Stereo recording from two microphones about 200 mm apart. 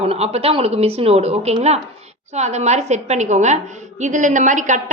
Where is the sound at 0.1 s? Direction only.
30° right (ahead or behind).